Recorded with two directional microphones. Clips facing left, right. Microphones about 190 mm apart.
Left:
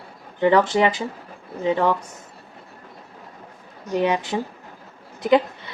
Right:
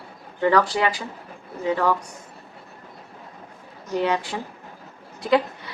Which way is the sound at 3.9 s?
15° left (ahead or behind).